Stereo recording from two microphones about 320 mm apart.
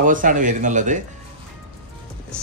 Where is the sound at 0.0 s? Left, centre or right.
Right.